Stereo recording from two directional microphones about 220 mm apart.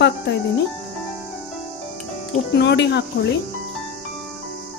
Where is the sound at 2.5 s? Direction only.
50° left (ahead or behind).